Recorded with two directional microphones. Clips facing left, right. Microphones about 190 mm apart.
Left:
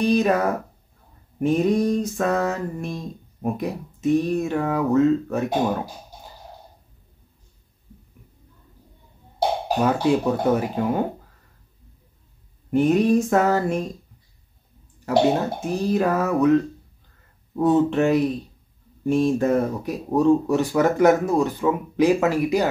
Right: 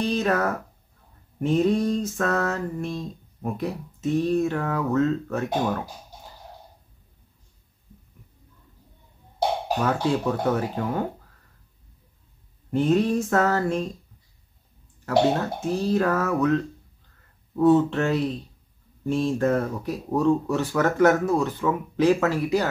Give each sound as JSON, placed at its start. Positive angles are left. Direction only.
{"t": 0.0, "sound": "speech", "side_deg": 15}
{"t": 9.8, "sound": "speech", "side_deg": 15}
{"t": 12.7, "sound": "speech", "side_deg": 15}
{"t": 15.0, "sound": "speech", "side_deg": 15}